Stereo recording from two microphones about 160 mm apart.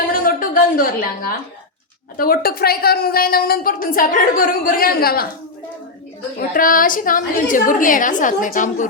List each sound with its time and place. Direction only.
0.1 s a sound: 65° left (ahead or behind)
2.1 s a woman's voice: 65° left (ahead or behind)
6.5 s a woman's voice: 60° left (ahead or behind)